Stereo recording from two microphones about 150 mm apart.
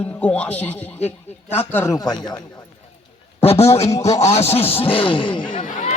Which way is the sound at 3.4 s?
40° left (ahead or behind).